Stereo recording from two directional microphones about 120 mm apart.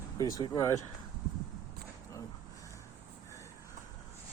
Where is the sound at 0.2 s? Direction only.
30° left (ahead or behind).